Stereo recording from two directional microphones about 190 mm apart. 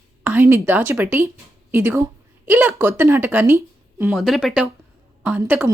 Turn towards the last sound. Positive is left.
turn(degrees=-10)  # may be behind; listen again after turning